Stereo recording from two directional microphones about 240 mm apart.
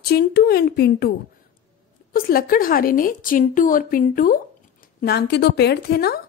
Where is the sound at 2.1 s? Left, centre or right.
Left.